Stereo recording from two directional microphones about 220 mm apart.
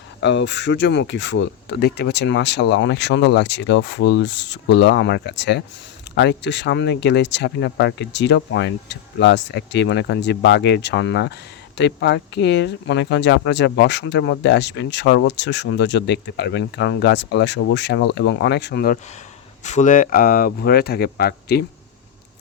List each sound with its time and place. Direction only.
0.2 s speech: 55° left (ahead or behind)
19.6 s speech: 35° left (ahead or behind)